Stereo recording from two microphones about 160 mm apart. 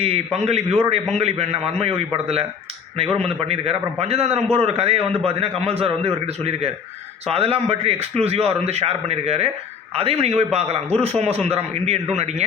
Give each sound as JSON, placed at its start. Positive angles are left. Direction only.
{"t": 0.0, "sound": "a man's voice", "side_deg": -40}
{"t": 3.5, "sound": "a man's voice", "side_deg": -40}